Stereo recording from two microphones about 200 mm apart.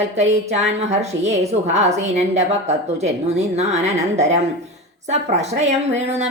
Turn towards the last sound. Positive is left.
turn(degrees=-35)  # may be behind; listen again after turning